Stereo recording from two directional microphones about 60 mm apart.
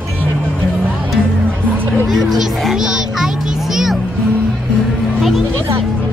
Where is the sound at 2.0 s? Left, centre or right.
Centre.